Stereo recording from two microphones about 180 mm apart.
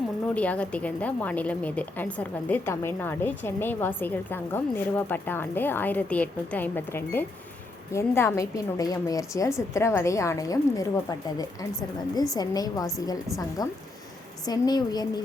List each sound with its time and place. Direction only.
0.3 s a woman's voice: 5° left (ahead or behind)
12.1 s a woman's voice: 20° left (ahead or behind)